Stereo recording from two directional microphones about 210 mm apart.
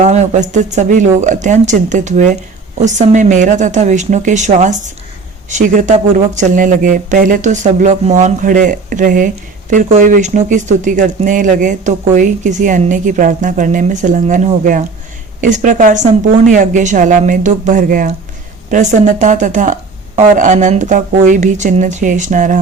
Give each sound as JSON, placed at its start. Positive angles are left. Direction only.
{"t": 0.0, "sound": "speech", "side_deg": -35}